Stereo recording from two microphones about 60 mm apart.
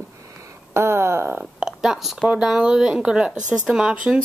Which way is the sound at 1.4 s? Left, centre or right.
Centre.